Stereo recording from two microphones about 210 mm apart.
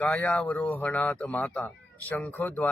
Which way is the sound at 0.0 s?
5° left (ahead or behind).